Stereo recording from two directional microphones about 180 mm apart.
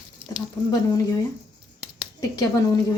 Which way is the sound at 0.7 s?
20° left (ahead or behind).